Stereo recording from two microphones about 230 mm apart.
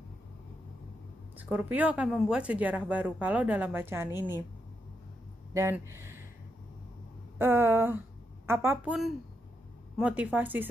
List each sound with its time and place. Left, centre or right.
1.3 s speech: centre
5.5 s speech: centre
7.3 s speech: centre